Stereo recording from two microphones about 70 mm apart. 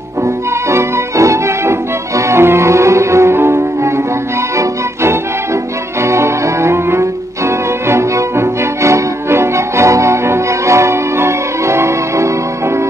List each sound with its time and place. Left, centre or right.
0.7 s music: right
5.9 s music: right